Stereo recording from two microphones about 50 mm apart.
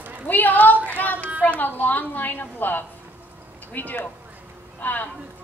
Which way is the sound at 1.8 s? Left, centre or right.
Left.